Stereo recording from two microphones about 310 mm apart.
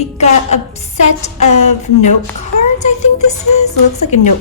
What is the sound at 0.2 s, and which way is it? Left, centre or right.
A woman's voice, left.